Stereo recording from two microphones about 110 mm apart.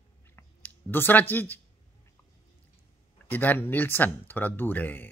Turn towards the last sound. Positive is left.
turn(degrees=15)  # may be behind; listen again after turning